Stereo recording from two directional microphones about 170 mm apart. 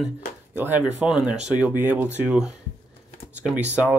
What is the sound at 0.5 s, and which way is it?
Speech, 10° right (ahead or behind).